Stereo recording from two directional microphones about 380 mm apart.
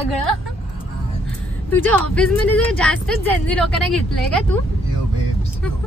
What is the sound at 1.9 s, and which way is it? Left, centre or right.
A woman's voice, centre.